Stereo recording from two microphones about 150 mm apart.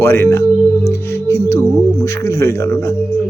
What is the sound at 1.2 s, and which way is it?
Music, 20° left (ahead or behind).